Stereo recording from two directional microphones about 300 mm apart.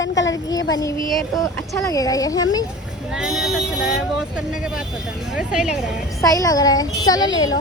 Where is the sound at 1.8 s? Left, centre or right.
Centre.